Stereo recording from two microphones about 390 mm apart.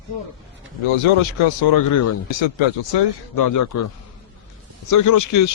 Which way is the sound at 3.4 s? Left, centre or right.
Left.